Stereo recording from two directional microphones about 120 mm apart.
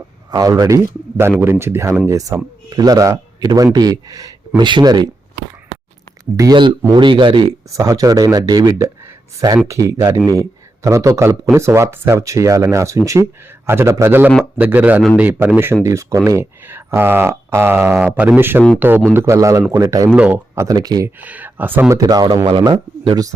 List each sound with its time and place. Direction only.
0.3 s speech: 30° right (ahead or behind)
1.1 s speech: 15° right (ahead or behind); by 5.0 s 35° right (ahead or behind)
6.3 s speech: 30° right (ahead or behind)
6.9 s speech: 40° right (ahead or behind)
7.7 s speech: 25° right (ahead or behind)
20.1 s speech: 10° right (ahead or behind)
20.6 s speech: 30° right (ahead or behind)
21.2 s speech: 15° right (ahead or behind); by 23.2 s 40° right (ahead or behind)